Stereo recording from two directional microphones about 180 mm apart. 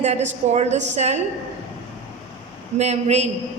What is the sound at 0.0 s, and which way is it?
A woman's voice, 40° right (ahead or behind).